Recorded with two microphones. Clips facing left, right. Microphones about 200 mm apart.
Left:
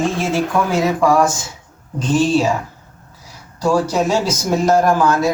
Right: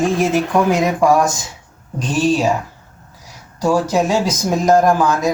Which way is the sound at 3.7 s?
15° right (ahead or behind).